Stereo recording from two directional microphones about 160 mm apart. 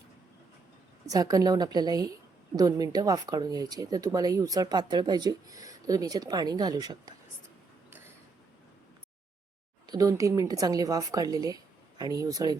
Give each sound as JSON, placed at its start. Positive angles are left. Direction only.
{"t": 1.0, "sound": "speech", "side_deg": -25}
{"t": 7.9, "sound": "mechanisms", "side_deg": -15}
{"t": 9.8, "sound": "speech", "side_deg": -25}